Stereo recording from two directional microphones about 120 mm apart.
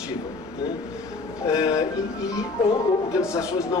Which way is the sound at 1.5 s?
30° left (ahead or behind).